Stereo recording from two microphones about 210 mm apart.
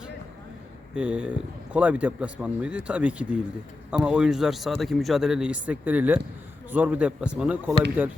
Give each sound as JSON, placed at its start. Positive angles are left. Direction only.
{"t": 0.9, "sound": "speech", "side_deg": -5}